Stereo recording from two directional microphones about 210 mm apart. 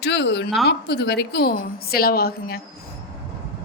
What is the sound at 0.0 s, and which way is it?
A woman's voice, 55° left (ahead or behind).